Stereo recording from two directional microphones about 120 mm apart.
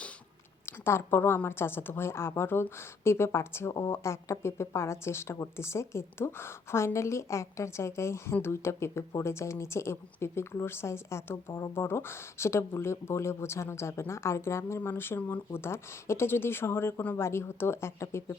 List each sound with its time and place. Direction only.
0.6 s a woman's voice: 20° left (ahead or behind)